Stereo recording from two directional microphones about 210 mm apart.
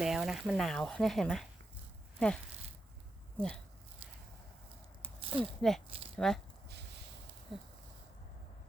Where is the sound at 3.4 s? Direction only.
5° left (ahead or behind).